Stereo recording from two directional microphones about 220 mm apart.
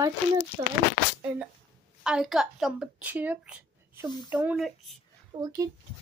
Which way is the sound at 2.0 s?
5° right (ahead or behind).